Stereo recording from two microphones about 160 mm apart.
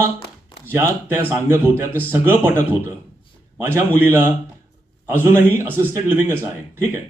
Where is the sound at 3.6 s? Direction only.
15° right (ahead or behind).